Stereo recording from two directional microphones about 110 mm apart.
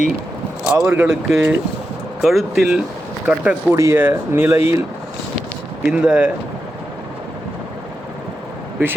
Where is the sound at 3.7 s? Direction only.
25° right (ahead or behind).